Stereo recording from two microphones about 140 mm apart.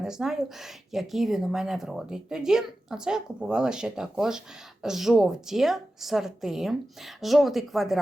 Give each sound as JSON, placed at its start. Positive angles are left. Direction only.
{"t": 0.0, "sound": "speech", "side_deg": -5}